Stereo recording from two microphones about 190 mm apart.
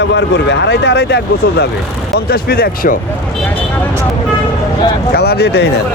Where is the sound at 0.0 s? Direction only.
70° left (ahead or behind); by 3.0 s 50° left (ahead or behind).